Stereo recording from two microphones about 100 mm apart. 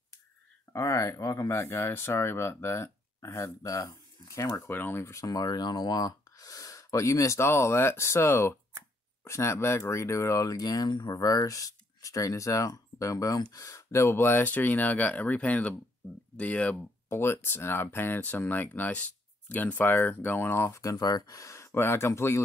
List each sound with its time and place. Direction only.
0.7 s speech: 30° left (ahead or behind); by 16.8 s 10° left (ahead or behind)
17.1 s speech: 25° left (ahead or behind)